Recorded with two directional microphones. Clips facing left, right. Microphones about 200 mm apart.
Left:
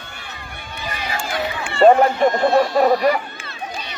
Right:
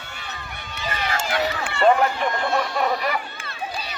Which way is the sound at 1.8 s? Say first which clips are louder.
Left 6 dB; 40° left (ahead or behind).